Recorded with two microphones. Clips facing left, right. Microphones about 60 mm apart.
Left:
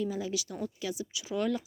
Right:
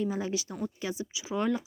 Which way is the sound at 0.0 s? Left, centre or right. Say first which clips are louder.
Right 2 dB; right.